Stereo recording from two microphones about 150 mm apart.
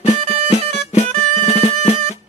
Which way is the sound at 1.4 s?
45° left (ahead or behind).